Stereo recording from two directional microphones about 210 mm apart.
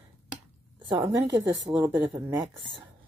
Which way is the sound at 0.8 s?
20° right (ahead or behind).